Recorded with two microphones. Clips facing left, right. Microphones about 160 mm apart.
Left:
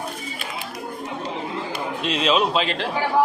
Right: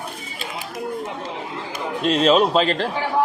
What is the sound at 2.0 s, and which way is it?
Speech, 45° right (ahead or behind).